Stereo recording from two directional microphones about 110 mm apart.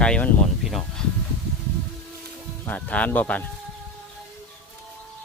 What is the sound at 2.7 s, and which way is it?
Speech, 15° left (ahead or behind).